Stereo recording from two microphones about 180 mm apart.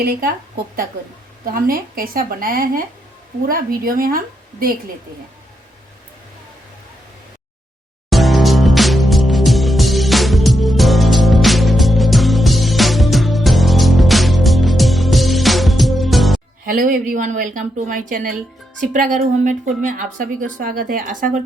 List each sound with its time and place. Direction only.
0.0 s a woman's voice: 55° right (ahead or behind)
1.5 s speech: 55° right (ahead or behind)
8.1 s music: centre (ahead or behind)
16.6 s speech: 50° right (ahead or behind)